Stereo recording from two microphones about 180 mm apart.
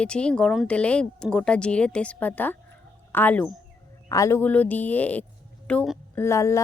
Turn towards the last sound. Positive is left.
turn(degrees=15)  # may be behind; listen again after turning